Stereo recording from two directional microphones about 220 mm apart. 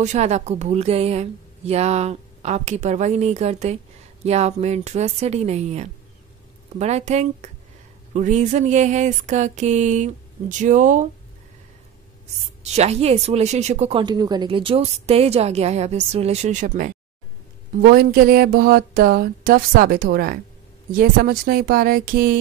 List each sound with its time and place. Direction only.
0.0 s a woman's voice: 30° right (ahead or behind)
12.7 s speech: 30° right (ahead or behind)
17.8 s a sound: 40° right (ahead or behind)
20.9 s a woman's voice: 40° right (ahead or behind)